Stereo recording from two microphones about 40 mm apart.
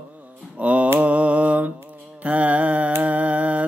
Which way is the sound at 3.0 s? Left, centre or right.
Right.